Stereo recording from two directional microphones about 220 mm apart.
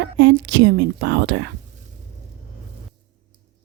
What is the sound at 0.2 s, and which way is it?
A woman's voice, 55° right (ahead or behind).